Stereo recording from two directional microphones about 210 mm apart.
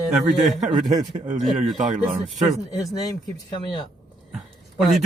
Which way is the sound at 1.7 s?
35° right (ahead or behind).